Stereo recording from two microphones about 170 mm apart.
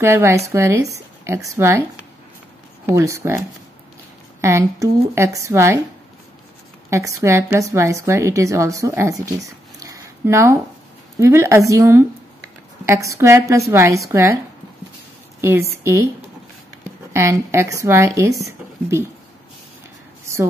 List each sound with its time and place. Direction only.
0.0 s a woman's voice: 15° right (ahead or behind)
2.9 s a woman's voice: 15° right (ahead or behind)
6.9 s a woman's voice: 20° right (ahead or behind)
15.4 s a woman's voice: 15° right (ahead or behind)
17.1 s a woman's voice: 15° right (ahead or behind)